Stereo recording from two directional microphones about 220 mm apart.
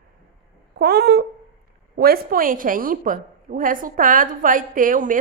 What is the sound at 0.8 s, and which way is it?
A woman's voice, 45° right (ahead or behind).